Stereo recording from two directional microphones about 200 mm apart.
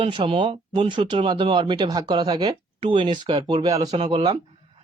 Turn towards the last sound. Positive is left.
turn(degrees=-25)  # may be behind; listen again after turning